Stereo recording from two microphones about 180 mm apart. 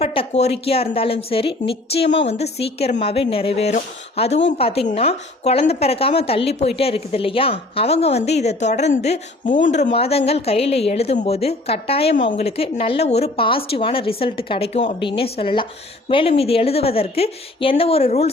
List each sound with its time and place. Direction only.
0.0 s a woman's voice: 35° left (ahead or behind)